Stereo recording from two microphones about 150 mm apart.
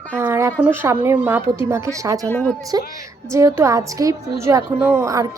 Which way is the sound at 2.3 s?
10° left (ahead or behind).